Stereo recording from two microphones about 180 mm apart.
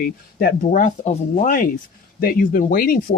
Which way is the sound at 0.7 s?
40° left (ahead or behind).